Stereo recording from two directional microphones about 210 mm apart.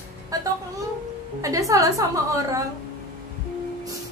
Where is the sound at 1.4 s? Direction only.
15° right (ahead or behind).